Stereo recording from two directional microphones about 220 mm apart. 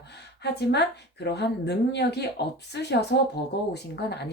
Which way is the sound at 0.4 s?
50° left (ahead or behind).